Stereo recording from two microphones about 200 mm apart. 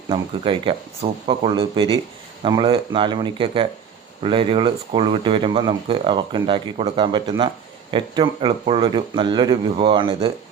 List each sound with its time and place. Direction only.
0.1 s speech: 25° right (ahead or behind)